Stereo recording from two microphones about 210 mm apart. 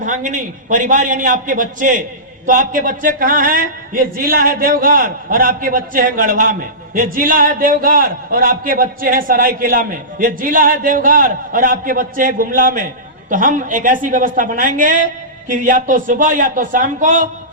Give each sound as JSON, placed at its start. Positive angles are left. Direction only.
{"t": 0.0, "sound": "speech", "side_deg": -35}